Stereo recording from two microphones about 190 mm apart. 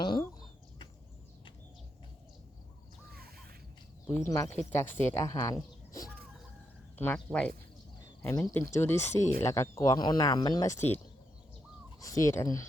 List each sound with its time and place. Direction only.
0.0 s chicken: 20° left (ahead or behind)
4.1 s speech: 15° left (ahead or behind)